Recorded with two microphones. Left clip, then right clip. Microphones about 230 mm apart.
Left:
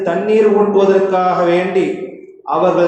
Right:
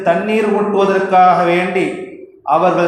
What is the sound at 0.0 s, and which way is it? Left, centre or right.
A man's voice, right.